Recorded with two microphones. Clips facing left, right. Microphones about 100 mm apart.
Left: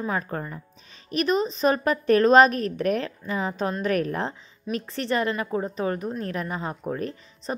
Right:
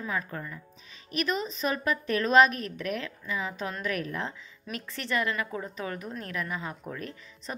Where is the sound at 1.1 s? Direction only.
30° left (ahead or behind).